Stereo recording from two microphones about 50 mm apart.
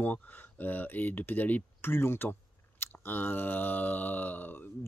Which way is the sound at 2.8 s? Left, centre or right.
Left.